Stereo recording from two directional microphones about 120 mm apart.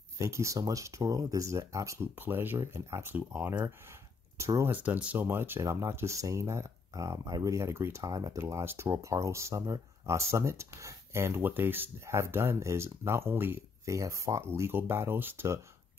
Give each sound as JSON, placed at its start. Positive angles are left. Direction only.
{"t": 0.2, "sound": "speech", "side_deg": -25}
{"t": 4.7, "sound": "speech", "side_deg": -15}